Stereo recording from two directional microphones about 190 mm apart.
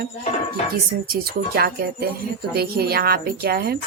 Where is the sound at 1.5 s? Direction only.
55° right (ahead or behind).